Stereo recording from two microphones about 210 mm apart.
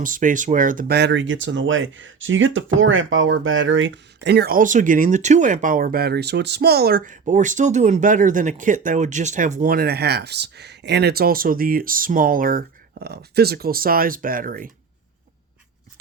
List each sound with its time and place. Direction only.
0.0 s speech: 40° right (ahead or behind)